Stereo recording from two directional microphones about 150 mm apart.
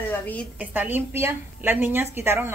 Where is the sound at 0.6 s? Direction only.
10° right (ahead or behind).